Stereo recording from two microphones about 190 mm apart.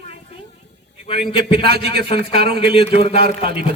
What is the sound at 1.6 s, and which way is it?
Speech, 55° right (ahead or behind).